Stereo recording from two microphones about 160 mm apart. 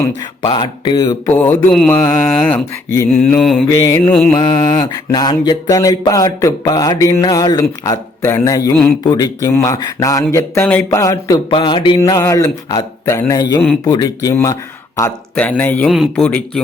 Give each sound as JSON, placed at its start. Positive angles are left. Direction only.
{"t": 0.4, "sound": "mantra", "side_deg": 30}
{"t": 1.3, "sound": "mantra", "side_deg": 10}
{"t": 3.7, "sound": "mantra", "side_deg": 15}
{"t": 4.3, "sound": "mantra", "side_deg": 30}
{"t": 15.4, "sound": "mantra", "side_deg": 10}
{"t": 15.9, "sound": "mantra", "side_deg": 0}